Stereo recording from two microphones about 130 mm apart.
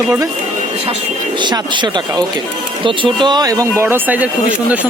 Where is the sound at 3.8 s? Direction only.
15° right (ahead or behind).